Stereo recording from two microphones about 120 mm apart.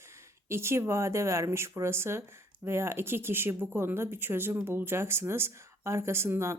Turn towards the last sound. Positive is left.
turn(degrees=-20)  # may be behind; listen again after turning